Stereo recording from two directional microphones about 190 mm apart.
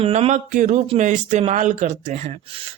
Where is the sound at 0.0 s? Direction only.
35° right (ahead or behind).